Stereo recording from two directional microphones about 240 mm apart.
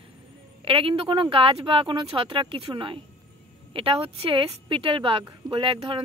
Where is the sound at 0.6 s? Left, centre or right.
Right.